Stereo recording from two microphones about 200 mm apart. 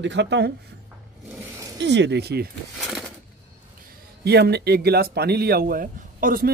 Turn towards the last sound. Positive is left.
turn(degrees=-45)  # may be behind; listen again after turning